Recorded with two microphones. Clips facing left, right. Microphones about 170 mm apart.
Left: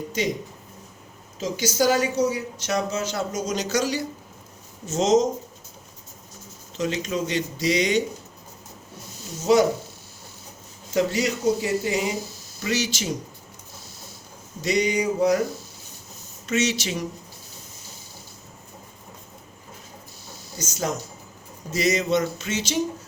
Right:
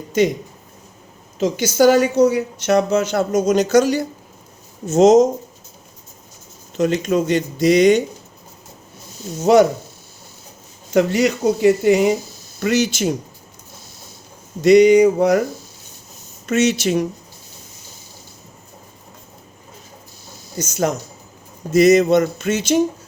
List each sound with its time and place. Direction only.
0.2 s a woman's voice: 55° right (ahead or behind)
1.4 s a woman's voice: 65° right (ahead or behind)
6.7 s speech: 55° right (ahead or behind)
9.4 s a woman's voice: 60° right (ahead or behind)
10.9 s a woman's voice: 65° right (ahead or behind)
14.6 s a woman's voice: 60° right (ahead or behind)
16.5 s a woman's voice: 55° right (ahead or behind)
20.6 s a woman's voice: 60° right (ahead or behind)